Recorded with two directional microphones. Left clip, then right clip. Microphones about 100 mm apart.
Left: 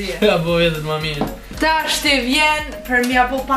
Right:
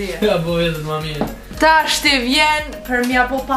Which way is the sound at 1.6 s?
20° right (ahead or behind).